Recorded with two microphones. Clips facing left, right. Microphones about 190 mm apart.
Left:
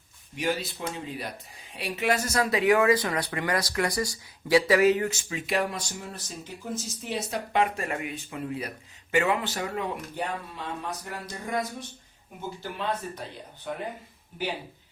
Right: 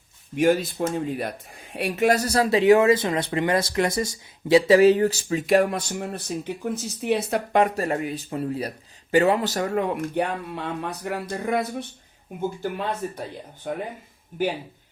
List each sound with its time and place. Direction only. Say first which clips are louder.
0.3 s speech: right 9 dB; 50° right (ahead or behind)
10.2 s speech: right 7 dB; 60° right (ahead or behind)
12.4 s speech: right 7 dB; 50° right (ahead or behind)